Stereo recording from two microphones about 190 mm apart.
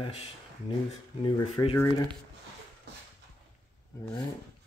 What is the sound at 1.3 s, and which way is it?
Speech, 30° left (ahead or behind).